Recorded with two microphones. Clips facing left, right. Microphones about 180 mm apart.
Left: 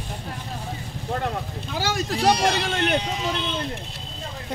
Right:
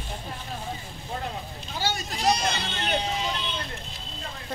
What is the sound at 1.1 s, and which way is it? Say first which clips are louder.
Speech: left 6 dB; 65° left (ahead or behind).